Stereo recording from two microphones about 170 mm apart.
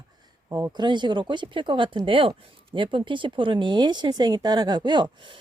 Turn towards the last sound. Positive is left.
turn(degrees=-30)  # may be behind; listen again after turning